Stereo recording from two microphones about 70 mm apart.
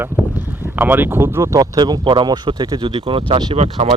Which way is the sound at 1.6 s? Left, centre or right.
Right.